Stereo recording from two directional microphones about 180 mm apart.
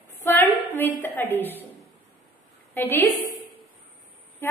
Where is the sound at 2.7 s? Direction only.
10° left (ahead or behind).